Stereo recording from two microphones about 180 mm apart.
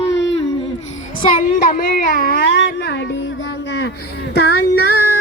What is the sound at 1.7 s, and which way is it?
Speech, 55° left (ahead or behind).